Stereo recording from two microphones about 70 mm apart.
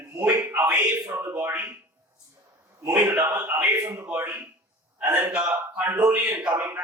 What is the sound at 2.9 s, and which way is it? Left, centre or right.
A man's voice, right.